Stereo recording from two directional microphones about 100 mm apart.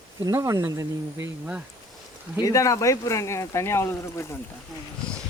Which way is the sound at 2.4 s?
30° left (ahead or behind).